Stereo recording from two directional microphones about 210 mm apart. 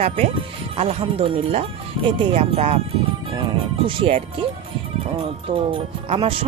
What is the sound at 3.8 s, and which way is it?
Speech, 25° right (ahead or behind).